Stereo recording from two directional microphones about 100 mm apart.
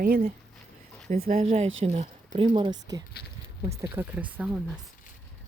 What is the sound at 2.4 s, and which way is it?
Speech, 65° right (ahead or behind).